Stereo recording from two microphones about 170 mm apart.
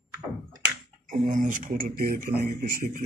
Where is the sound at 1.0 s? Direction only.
50° right (ahead or behind).